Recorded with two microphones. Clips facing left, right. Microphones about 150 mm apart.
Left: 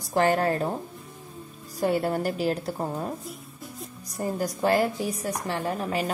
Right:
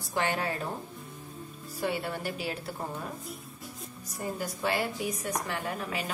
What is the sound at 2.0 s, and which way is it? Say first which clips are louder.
Speech: left 9 dB; 40° left (ahead or behind).